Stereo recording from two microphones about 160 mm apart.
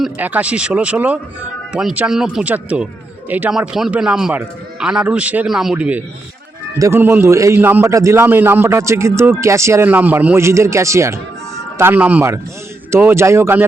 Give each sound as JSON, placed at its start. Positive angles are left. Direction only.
{"t": 0.0, "sound": "a man's voice", "side_deg": -10}
{"t": 6.7, "sound": "a man's voice", "side_deg": -15}